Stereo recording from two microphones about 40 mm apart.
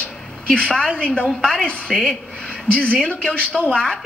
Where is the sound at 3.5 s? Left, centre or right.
Centre.